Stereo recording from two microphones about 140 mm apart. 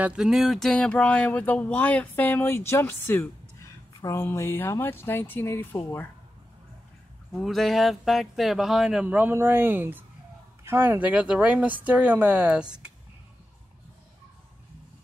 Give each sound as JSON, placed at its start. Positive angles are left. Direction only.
{"t": 0.0, "sound": "speech", "side_deg": -5}
{"t": 7.3, "sound": "speech", "side_deg": 0}